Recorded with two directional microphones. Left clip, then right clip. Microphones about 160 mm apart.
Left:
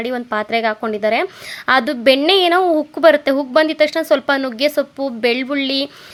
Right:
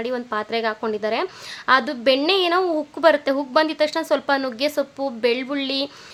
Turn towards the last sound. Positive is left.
turn(degrees=25)  # may be behind; listen again after turning